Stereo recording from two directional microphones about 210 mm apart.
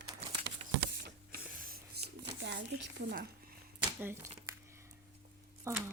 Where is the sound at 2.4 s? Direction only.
50° right (ahead or behind).